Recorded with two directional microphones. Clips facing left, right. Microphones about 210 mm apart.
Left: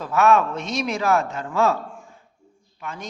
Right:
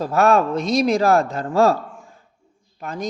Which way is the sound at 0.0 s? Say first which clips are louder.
Right 2 dB; 35° right (ahead or behind).